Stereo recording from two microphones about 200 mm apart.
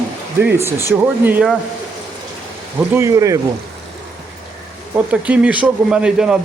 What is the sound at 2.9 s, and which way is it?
Speech, 15° right (ahead or behind).